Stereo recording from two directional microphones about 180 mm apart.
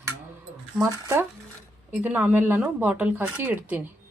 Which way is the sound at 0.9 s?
15° right (ahead or behind).